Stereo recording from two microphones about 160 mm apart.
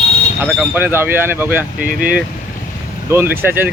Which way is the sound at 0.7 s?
15° right (ahead or behind).